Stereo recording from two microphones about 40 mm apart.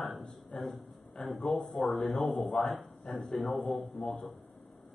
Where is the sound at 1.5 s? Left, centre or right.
Centre.